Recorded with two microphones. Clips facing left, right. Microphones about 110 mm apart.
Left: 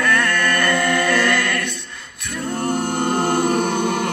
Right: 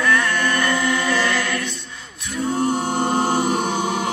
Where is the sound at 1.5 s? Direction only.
60° left (ahead or behind).